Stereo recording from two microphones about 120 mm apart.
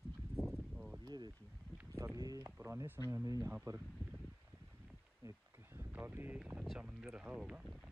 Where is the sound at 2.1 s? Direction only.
30° right (ahead or behind).